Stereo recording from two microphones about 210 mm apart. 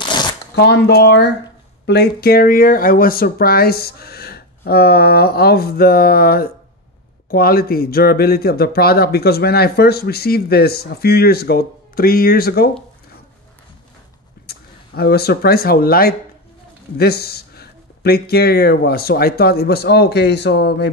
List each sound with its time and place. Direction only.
0.1 s shuffling cards: 20° left (ahead or behind)
0.6 s speech: 55° left (ahead or behind)
14.4 s speech: 50° left (ahead or behind)